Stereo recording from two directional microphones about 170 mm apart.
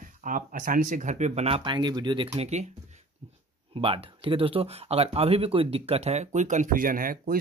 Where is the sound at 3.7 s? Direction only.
35° right (ahead or behind).